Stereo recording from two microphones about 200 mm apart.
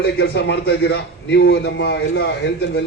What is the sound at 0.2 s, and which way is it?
A man's voice, 60° left (ahead or behind).